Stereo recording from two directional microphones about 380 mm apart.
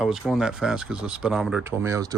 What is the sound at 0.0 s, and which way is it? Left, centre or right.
Speech, centre.